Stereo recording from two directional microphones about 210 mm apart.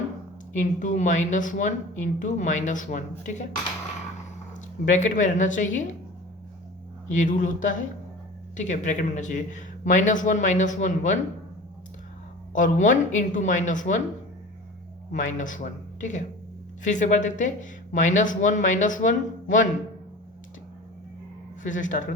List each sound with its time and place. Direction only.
0.5 s speech: 35° left (ahead or behind)
4.9 s speech: 35° left (ahead or behind)
7.1 s speech: 35° left (ahead or behind)
12.5 s speech: 35° left (ahead or behind)
15.1 s speech: 35° left (ahead or behind)
21.6 s speech: 35° left (ahead or behind)